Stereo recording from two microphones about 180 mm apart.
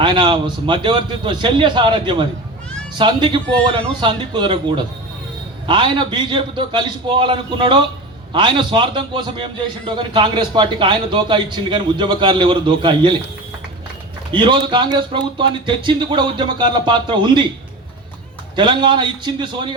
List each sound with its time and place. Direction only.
0.0 s a man's voice: 25° right (ahead or behind)
14.3 s a man's voice: 25° right (ahead or behind)
18.5 s a man's voice: 25° right (ahead or behind)